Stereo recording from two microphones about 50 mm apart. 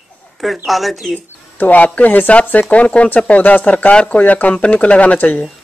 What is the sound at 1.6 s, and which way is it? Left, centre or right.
Speech, left.